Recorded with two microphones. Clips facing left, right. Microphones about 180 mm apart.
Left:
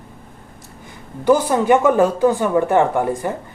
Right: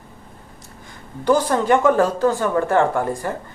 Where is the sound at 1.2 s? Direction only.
10° left (ahead or behind).